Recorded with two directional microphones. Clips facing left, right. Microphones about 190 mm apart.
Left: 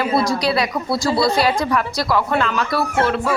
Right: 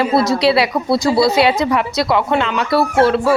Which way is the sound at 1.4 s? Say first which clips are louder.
Right 4 dB; 20° right (ahead or behind).